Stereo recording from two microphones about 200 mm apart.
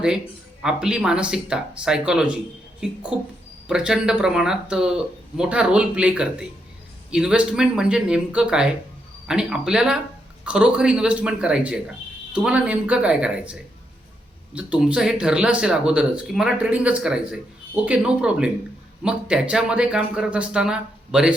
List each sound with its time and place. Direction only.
0.6 s speech: 5° right (ahead or behind)